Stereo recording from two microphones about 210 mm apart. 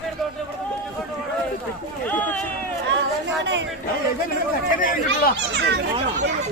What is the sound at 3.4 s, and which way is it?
Speech, 60° right (ahead or behind).